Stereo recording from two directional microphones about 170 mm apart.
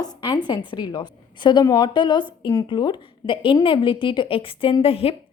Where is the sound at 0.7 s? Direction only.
25° left (ahead or behind).